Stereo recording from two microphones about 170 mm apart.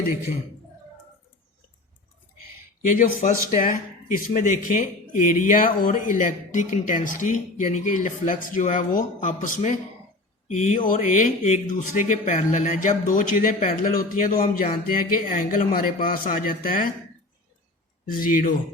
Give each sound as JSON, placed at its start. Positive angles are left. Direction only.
{"t": 2.8, "sound": "a man's voice", "side_deg": 50}
{"t": 18.1, "sound": "speech", "side_deg": 55}